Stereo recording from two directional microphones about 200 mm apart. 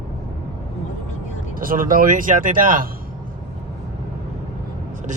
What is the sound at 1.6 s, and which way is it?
Speech, 45° right (ahead or behind).